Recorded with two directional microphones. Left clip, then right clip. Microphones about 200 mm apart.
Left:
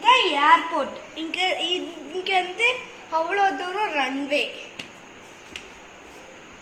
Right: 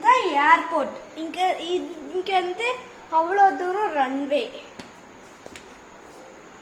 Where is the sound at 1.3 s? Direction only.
50° right (ahead or behind).